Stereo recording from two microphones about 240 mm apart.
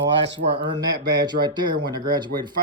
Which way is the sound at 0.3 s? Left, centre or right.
Right.